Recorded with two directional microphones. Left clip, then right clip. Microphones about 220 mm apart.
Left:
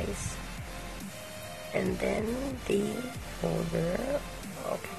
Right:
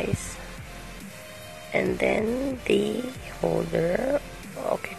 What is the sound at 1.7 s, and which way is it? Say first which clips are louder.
Speech: right 7 dB; 20° right (ahead or behind).